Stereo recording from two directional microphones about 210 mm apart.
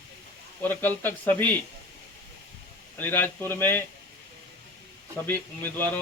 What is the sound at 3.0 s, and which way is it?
Speech, 10° left (ahead or behind).